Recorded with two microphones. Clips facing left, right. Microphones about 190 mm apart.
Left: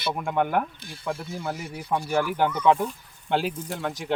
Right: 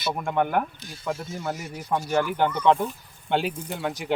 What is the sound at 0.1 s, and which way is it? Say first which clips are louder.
Speech: even; centre (ahead or behind).